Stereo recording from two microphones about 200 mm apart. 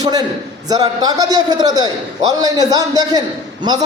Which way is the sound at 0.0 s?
20° right (ahead or behind).